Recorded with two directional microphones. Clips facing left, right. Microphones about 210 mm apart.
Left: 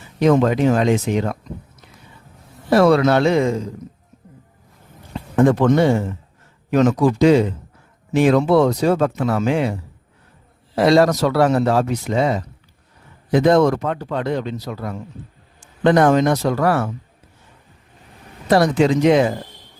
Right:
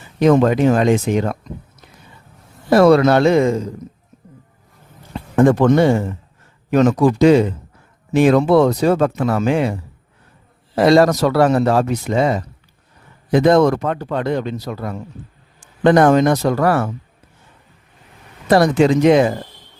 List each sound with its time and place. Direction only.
0.3 s speech: 50° right (ahead or behind)
2.6 s speech: 45° right (ahead or behind)
5.4 s speech: 50° right (ahead or behind)
10.8 s speech: 50° right (ahead or behind)
18.5 s speech: 55° right (ahead or behind)